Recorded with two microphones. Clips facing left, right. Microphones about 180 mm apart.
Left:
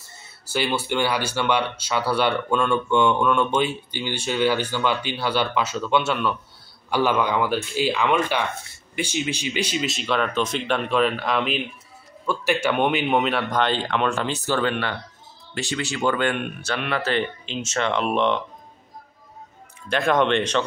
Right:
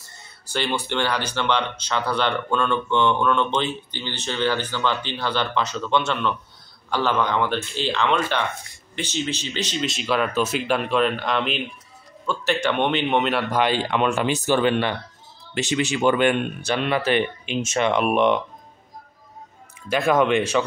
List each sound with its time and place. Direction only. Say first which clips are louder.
0.5 s speech: left 1 dB; 5° left (ahead or behind); by 18.4 s 15° right (ahead or behind)
19.9 s speech: right 1 dB; 5° right (ahead or behind)